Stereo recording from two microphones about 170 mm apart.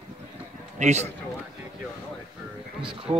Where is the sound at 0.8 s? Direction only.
40° right (ahead or behind).